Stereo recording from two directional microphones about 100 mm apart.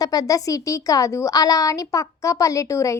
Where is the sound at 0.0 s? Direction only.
40° left (ahead or behind).